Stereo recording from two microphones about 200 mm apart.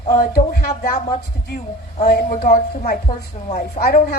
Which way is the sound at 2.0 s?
45° left (ahead or behind).